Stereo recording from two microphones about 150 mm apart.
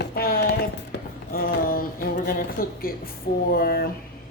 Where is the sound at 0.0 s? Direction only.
85° left.